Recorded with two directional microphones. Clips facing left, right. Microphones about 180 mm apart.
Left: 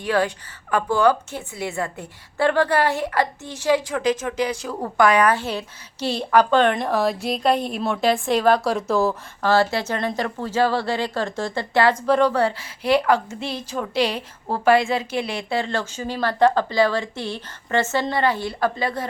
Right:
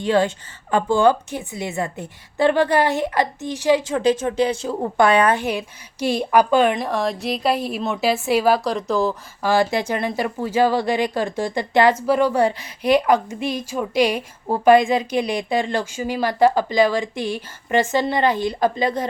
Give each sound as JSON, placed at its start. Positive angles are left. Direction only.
{"t": 0.0, "sound": "a woman's voice", "side_deg": -25}
{"t": 3.9, "sound": "a woman's voice", "side_deg": -30}
{"t": 9.4, "sound": "a woman's voice", "side_deg": -15}